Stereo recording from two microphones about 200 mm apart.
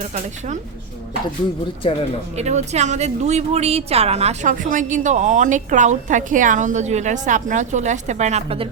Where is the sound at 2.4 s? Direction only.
35° right (ahead or behind).